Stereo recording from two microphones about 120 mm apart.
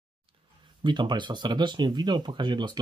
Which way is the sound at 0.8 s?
40° right (ahead or behind).